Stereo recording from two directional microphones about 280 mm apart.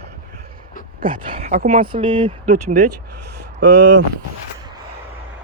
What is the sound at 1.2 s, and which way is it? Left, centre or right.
Speech, centre.